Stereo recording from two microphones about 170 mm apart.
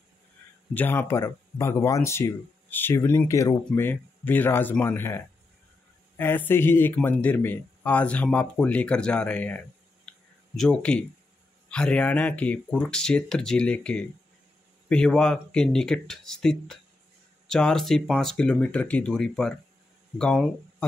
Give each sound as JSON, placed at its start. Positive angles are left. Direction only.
{"t": 0.7, "sound": "speech", "side_deg": 10}
{"t": 10.0, "sound": "clicking", "side_deg": 5}
{"t": 11.7, "sound": "speech", "side_deg": 5}